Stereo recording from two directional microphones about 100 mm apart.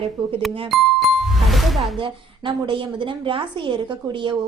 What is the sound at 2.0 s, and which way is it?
A woman's voice, 55° right (ahead or behind).